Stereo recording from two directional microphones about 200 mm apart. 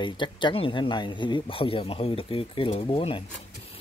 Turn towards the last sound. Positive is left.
turn(degrees=25)  # may be behind; listen again after turning